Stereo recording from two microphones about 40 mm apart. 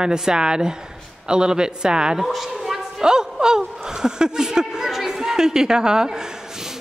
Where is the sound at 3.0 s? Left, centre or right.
Centre.